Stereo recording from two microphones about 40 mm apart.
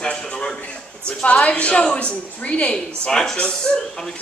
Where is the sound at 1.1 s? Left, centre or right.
Left.